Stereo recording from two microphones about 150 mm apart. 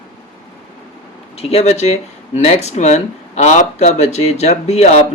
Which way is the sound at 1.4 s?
45° left (ahead or behind).